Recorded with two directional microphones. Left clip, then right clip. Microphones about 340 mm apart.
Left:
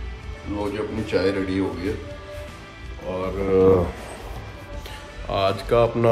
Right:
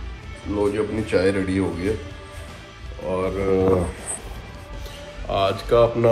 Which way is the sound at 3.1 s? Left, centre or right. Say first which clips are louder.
Right 4 dB; centre.